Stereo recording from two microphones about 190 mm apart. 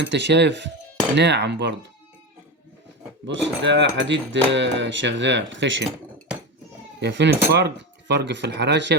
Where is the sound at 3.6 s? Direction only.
70° right (ahead or behind).